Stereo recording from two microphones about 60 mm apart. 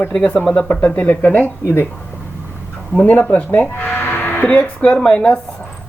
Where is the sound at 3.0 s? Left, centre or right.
Left.